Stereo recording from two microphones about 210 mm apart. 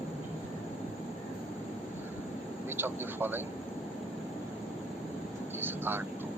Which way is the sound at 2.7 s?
10° right (ahead or behind).